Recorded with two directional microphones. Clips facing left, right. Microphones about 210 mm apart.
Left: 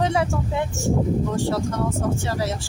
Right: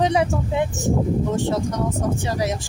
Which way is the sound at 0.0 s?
20° right (ahead or behind).